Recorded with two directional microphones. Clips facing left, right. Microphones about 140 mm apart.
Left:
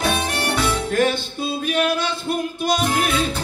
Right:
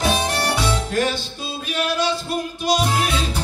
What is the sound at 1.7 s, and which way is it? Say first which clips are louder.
Music: right 1 dB; 50° left (ahead or behind).